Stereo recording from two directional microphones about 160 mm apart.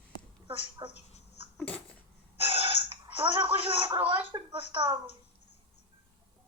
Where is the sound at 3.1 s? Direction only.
30° right (ahead or behind).